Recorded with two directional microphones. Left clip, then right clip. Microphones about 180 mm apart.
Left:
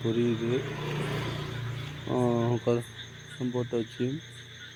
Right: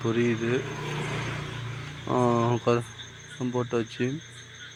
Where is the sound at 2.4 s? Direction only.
25° right (ahead or behind).